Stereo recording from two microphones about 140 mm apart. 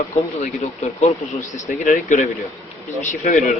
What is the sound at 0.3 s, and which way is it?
Speech, 50° left (ahead or behind).